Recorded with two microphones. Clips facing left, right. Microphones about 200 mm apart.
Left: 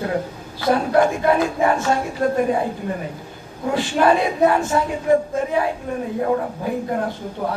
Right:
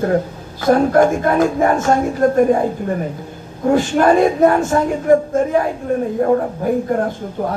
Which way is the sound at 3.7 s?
45° right (ahead or behind).